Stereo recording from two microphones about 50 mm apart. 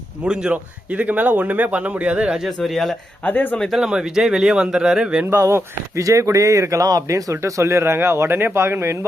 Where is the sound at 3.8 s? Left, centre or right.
Centre.